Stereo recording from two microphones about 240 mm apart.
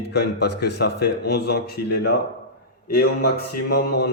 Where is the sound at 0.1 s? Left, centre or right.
Left.